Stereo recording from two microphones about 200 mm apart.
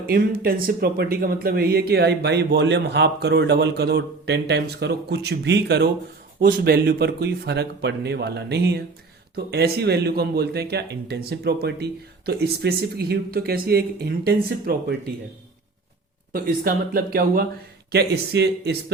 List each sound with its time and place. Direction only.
0.0 s speech: 50° right (ahead or behind)
16.3 s speech: 45° right (ahead or behind)